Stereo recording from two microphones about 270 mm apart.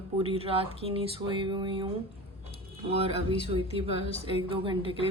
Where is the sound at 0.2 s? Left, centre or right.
Right.